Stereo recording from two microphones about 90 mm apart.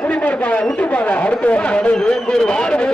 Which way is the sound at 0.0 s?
15° left (ahead or behind).